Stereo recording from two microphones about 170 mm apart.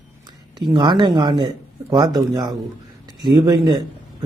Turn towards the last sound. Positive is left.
turn(degrees=-25)  # may be behind; listen again after turning